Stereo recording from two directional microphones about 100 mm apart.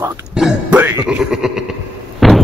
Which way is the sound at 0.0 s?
25° right (ahead or behind).